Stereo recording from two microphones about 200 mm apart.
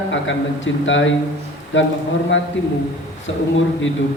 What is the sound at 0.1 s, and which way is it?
A man's voice, 70° left (ahead or behind).